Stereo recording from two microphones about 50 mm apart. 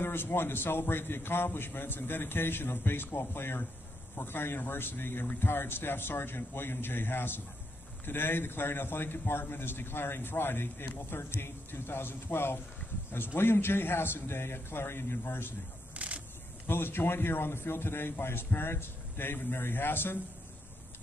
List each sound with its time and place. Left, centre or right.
0.0 s a man's voice: left
15.9 s a sound: right
16.6 s a man's voice: left